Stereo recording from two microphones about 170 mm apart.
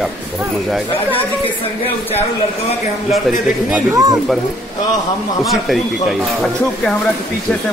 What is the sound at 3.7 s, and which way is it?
Speech, 20° right (ahead or behind).